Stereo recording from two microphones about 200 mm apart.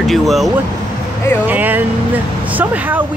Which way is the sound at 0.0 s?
Centre (ahead or behind).